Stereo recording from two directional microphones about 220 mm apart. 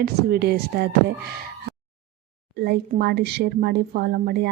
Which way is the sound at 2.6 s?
45° right (ahead or behind).